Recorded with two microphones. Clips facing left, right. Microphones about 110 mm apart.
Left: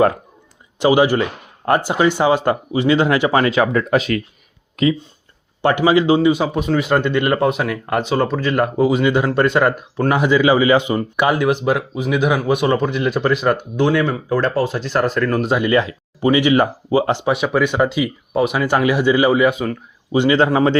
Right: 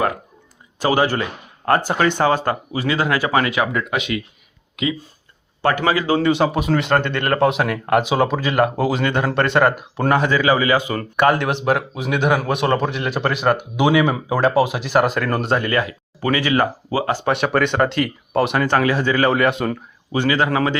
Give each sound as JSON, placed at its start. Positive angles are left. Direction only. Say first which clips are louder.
{"t": 0.8, "sound": "speech", "louder": "left 4 dB", "side_deg": 15}
{"t": 5.6, "sound": "speech", "louder": "left 4 dB", "side_deg": 20}
{"t": 6.1, "sound": "speech", "louder": "left 1 dB", "side_deg": 5}
{"t": 10.1, "sound": "speech", "louder": "left 2 dB", "side_deg": 15}
{"t": 11.2, "sound": "speech", "louder": "even", "side_deg": 5}
{"t": 15.5, "sound": "speech", "louder": "left 3 dB", "side_deg": 20}
{"t": 17.2, "sound": "speech", "louder": "left 1 dB", "side_deg": 0}
{"t": 19.3, "sound": "speech", "louder": "left 2 dB", "side_deg": 5}
{"t": 20.1, "sound": "speech", "louder": "left 4 dB", "side_deg": 25}